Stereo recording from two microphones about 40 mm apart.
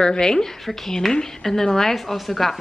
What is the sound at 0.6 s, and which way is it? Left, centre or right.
A woman's voice, centre.